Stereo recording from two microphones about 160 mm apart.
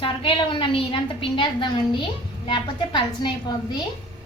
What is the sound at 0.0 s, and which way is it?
A woman's voice, 35° left (ahead or behind).